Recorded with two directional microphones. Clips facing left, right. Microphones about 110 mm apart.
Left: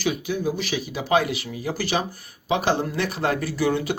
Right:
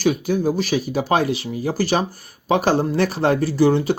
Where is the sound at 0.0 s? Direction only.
45° right (ahead or behind).